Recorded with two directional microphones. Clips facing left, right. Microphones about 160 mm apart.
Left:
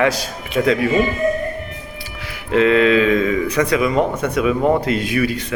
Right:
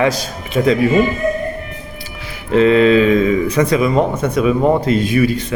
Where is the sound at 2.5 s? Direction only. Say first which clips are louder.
Right 3 dB; 30° right (ahead or behind).